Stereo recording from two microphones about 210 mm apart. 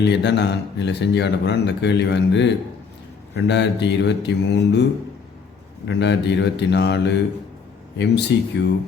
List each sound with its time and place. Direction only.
0.0 s speech: 55° left (ahead or behind)
5.9 s speech: 55° left (ahead or behind)